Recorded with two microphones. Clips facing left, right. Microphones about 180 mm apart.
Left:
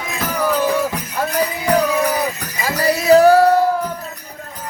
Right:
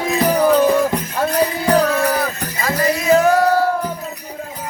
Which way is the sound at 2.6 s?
35° left (ahead or behind).